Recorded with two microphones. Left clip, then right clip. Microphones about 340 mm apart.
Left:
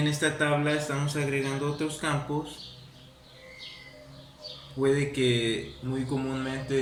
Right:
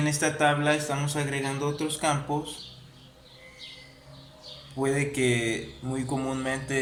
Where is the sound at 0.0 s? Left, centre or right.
Centre.